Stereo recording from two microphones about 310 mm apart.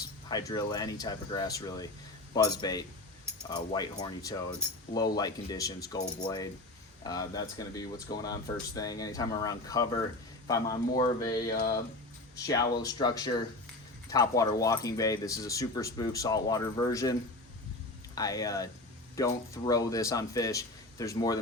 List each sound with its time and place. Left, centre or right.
0.3 s speech: centre
11.4 s a sound: left
12.4 s speech: centre